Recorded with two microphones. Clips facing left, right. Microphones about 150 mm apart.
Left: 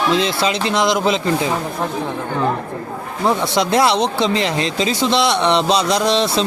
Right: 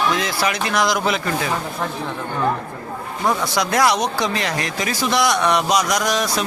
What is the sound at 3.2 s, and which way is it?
Speech, 25° left (ahead or behind).